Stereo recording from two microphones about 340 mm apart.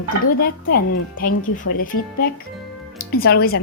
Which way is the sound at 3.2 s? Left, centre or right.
Left.